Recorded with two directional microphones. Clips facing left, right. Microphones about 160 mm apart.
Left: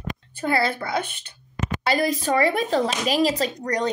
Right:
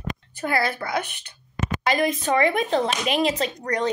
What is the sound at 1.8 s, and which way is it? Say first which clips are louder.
Speech: even; 35° left (ahead or behind).